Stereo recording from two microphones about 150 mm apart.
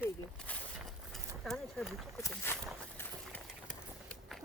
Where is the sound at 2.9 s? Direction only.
5° left (ahead or behind).